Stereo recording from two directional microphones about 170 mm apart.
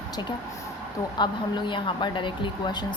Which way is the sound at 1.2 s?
25° left (ahead or behind).